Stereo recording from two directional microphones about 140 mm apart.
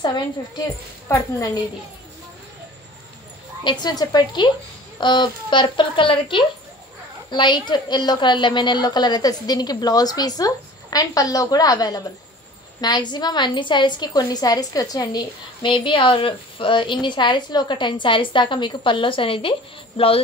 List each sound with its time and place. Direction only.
1.0 s a woman's voice: 20° left (ahead or behind)
3.8 s a woman's voice: 30° left (ahead or behind)